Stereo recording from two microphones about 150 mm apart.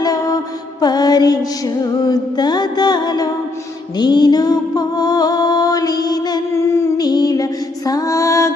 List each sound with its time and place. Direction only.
0.0 s music: 25° left (ahead or behind)